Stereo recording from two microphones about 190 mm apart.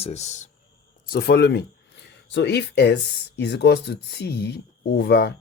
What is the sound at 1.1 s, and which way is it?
Speech, 55° left (ahead or behind).